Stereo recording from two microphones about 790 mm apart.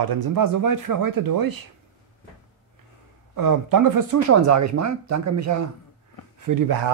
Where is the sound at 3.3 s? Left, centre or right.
Right.